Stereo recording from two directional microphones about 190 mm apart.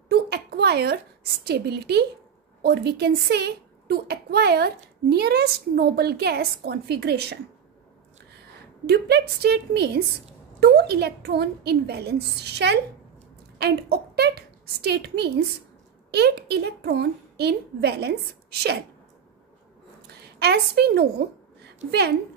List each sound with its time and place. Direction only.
0.1 s a sound: 60° right (ahead or behind)
1.4 s a child's voice: 60° right (ahead or behind)
8.8 s a child's voice: 60° right (ahead or behind)
20.1 s a woman's voice: 60° right (ahead or behind)